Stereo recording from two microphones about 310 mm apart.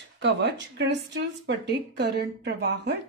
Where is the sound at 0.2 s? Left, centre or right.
Right.